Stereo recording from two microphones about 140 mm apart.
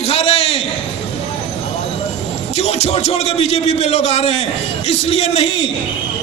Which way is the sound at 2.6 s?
50° left (ahead or behind).